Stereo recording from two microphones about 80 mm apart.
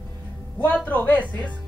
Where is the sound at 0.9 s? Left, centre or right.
Left.